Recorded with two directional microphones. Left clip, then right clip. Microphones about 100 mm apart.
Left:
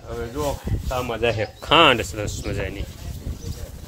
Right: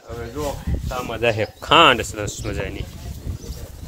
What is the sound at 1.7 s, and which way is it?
Speech, centre (ahead or behind).